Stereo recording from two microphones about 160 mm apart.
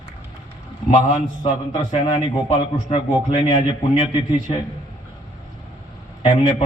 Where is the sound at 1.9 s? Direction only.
35° left (ahead or behind).